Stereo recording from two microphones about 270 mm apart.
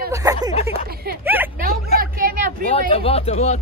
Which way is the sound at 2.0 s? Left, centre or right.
Right.